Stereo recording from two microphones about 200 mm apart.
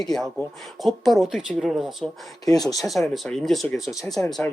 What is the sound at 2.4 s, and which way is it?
Speech, 20° left (ahead or behind).